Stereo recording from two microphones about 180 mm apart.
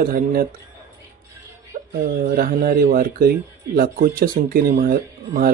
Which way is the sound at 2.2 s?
50° right (ahead or behind).